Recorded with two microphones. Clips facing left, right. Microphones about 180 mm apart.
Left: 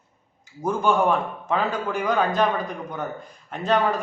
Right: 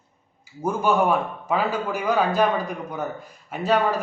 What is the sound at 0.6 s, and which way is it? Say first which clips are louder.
Speech: even; 10° right (ahead or behind).